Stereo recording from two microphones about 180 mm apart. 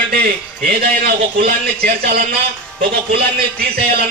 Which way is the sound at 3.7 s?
60° right (ahead or behind).